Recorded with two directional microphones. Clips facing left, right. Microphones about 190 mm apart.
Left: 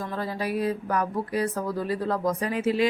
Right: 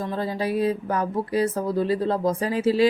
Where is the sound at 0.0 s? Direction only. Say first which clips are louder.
Right 4 dB; 25° right (ahead or behind).